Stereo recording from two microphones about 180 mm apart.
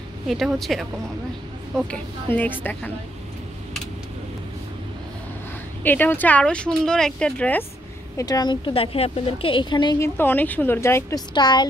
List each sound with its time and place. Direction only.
0.3 s speech: centre (ahead or behind)
2.6 s speech: 10° left (ahead or behind)
5.9 s speech: 10° left (ahead or behind)
8.2 s a woman's voice: 20° left (ahead or behind)